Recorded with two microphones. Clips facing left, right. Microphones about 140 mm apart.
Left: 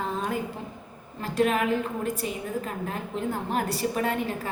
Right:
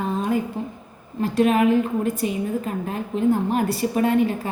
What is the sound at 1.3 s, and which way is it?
A woman's voice, 20° right (ahead or behind).